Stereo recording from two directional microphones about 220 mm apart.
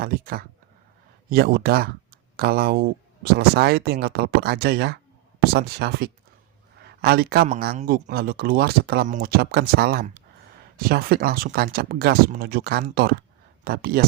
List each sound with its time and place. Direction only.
0.0 s speech: 40° right (ahead or behind)